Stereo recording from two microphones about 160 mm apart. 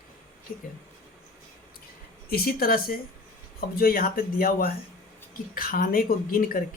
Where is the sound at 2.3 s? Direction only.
70° left (ahead or behind).